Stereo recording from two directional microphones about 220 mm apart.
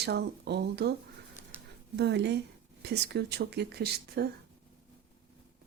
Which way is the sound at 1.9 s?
50° right (ahead or behind).